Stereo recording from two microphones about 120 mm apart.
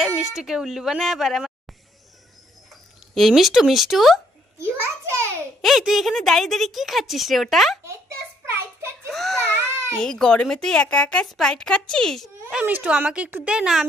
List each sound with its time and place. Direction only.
0.2 s speech: 5° right (ahead or behind)
3.2 s speech: centre (ahead or behind)
4.6 s a child's voice: 20° right (ahead or behind)
5.6 s speech: centre (ahead or behind)
9.1 s baby cry: 5° left (ahead or behind)
9.9 s speech: 5° left (ahead or behind)
12.5 s a woman's voice: 10° right (ahead or behind)